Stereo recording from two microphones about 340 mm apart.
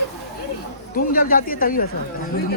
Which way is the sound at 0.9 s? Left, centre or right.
Left.